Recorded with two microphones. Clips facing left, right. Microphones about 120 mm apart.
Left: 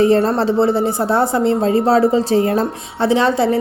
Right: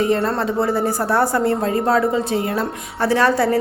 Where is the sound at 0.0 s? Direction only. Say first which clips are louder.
Left 5 dB; 30° left (ahead or behind).